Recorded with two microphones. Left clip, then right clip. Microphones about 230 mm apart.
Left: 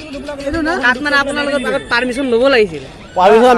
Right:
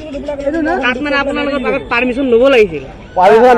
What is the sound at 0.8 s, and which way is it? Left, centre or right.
Speech, centre.